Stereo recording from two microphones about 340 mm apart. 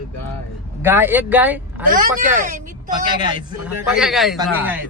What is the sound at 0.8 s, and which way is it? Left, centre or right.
A man's voice, centre.